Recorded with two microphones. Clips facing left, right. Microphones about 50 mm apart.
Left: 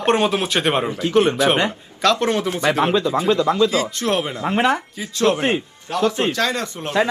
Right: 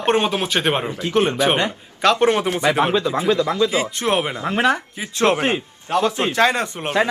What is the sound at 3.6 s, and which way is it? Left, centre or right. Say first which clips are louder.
A man's voice: left 1 dB; right.